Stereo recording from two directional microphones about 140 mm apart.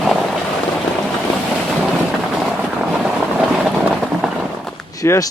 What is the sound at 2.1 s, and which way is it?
Boat, centre (ahead or behind).